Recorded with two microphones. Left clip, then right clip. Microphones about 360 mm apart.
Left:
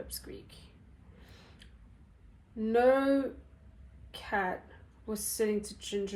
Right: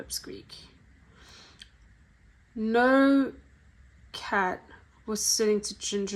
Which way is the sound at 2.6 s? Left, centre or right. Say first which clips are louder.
Right 4 dB; right.